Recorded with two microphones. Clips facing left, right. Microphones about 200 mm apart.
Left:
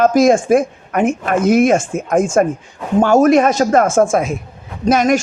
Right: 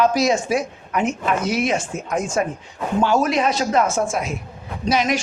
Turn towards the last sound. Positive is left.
turn(degrees=50)  # may be behind; listen again after turning